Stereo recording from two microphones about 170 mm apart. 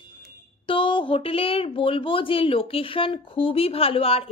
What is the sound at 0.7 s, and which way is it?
A woman's voice, 30° left (ahead or behind).